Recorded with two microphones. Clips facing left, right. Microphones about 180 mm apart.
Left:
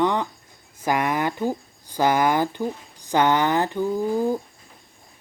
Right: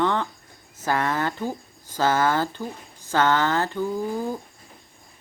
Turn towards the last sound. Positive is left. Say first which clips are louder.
# left 4 dB
turn(degrees=15)  # may be behind; listen again after turning